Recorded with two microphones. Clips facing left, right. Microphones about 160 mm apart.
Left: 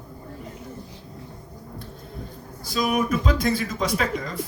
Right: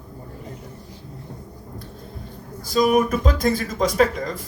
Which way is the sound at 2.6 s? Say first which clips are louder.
Right 5 dB; 45° right (ahead or behind).